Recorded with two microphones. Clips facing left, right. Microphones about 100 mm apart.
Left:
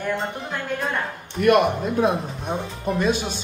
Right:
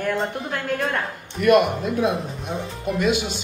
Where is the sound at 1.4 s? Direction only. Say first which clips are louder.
Even; 50° left (ahead or behind).